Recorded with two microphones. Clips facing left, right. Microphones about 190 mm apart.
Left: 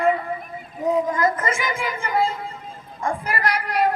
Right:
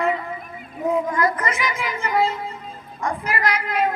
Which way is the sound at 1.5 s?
50° left (ahead or behind).